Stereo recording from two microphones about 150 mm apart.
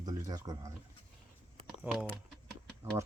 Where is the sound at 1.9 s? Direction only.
15° right (ahead or behind).